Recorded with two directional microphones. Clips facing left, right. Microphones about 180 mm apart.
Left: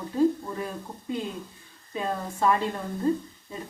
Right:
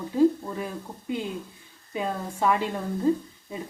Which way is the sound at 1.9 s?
15° right (ahead or behind).